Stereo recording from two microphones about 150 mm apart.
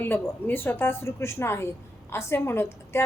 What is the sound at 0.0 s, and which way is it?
A woman's voice, 15° left (ahead or behind).